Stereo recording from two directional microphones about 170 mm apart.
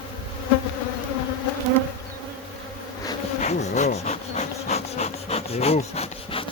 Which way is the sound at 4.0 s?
40° left (ahead or behind).